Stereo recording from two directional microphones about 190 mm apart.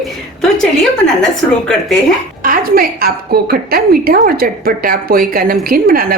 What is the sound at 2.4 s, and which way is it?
A woman's voice, 50° right (ahead or behind).